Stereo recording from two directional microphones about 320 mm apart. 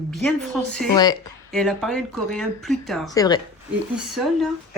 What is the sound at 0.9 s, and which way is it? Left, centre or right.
Speech, centre.